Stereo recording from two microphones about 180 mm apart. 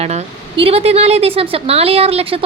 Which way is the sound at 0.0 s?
35° right (ahead or behind).